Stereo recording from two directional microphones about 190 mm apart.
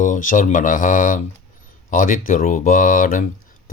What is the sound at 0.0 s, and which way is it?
Speech, 45° left (ahead or behind).